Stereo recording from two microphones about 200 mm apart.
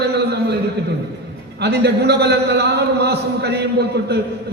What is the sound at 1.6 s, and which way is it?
A man's voice, 55° right (ahead or behind).